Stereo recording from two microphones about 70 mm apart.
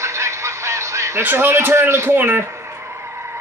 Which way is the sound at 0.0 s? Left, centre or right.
Right.